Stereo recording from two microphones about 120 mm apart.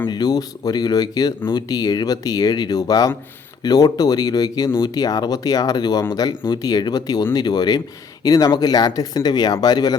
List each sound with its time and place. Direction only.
0.1 s speech: 35° left (ahead or behind)